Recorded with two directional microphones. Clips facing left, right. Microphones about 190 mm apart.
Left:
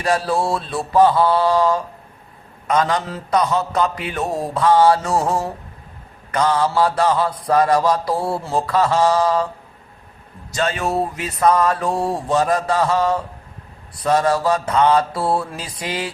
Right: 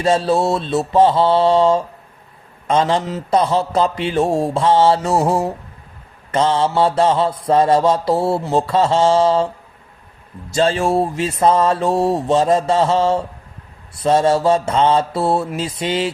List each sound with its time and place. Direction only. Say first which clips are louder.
0.0 s mantra: right 4 dB; 25° right (ahead or behind)
10.5 s mantra: right 5 dB; 30° right (ahead or behind)